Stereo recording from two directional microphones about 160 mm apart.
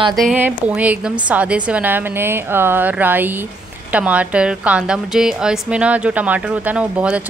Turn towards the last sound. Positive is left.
turn(degrees=-5)  # may be behind; listen again after turning